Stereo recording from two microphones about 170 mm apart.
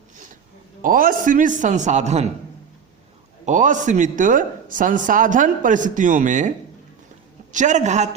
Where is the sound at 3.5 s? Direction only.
45° right (ahead or behind).